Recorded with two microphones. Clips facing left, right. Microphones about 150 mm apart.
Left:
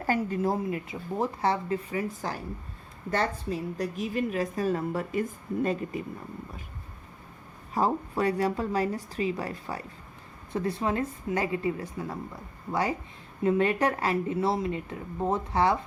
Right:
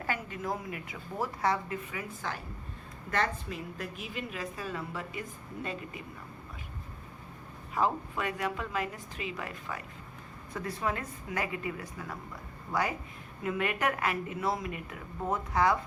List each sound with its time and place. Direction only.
0.0 s a woman's voice: 35° left (ahead or behind)
7.7 s speech: 35° left (ahead or behind)